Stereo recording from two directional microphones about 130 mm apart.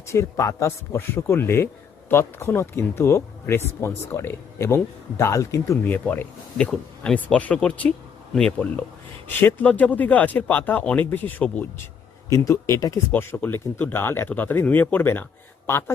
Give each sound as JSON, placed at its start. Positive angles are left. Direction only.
{"t": 0.1, "sound": "a man's voice", "side_deg": 20}
{"t": 12.3, "sound": "a man's voice", "side_deg": 25}